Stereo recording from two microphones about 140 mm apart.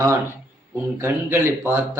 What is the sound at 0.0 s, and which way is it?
Speech, 20° right (ahead or behind).